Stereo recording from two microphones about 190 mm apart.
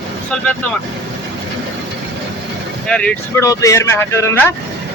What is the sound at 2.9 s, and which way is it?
Speech, 5° left (ahead or behind).